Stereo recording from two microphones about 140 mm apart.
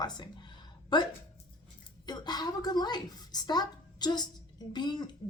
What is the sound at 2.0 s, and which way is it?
A woman's voice, 30° left (ahead or behind).